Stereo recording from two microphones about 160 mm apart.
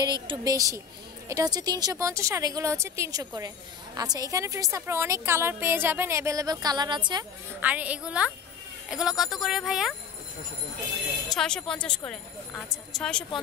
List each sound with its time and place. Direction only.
0.0 s speech: 25° right (ahead or behind)
7.6 s a woman's voice: 10° right (ahead or behind)
11.2 s speech: 5° left (ahead or behind)